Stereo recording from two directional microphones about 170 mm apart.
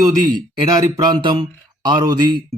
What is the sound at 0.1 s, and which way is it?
A man's voice, 25° right (ahead or behind).